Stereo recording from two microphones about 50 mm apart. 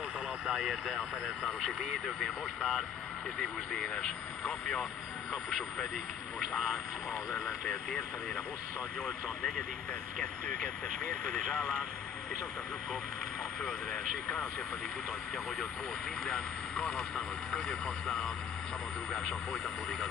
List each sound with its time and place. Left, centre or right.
0.5 s speech: centre
3.3 s speech: centre
6.5 s speech: centre
16.3 s speech: centre